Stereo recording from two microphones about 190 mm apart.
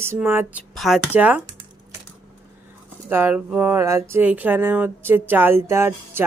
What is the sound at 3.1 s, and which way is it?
Speech, 10° right (ahead or behind).